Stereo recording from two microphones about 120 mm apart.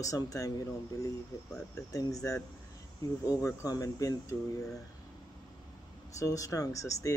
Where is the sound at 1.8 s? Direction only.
30° left (ahead or behind).